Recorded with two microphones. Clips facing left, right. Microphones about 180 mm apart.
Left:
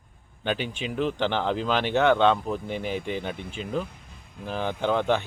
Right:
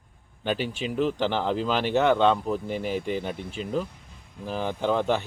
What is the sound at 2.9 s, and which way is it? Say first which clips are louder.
Speech: right 2 dB; 40° right (ahead or behind).